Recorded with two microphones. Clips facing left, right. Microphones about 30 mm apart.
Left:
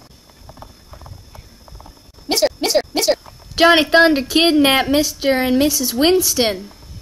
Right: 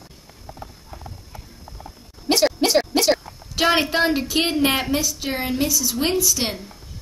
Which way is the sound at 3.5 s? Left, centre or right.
Left.